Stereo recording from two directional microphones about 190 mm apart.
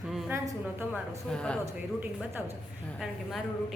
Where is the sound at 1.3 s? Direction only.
5° left (ahead or behind).